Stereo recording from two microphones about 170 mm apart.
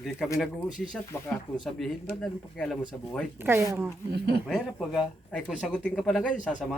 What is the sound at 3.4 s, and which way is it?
Speech, 15° right (ahead or behind).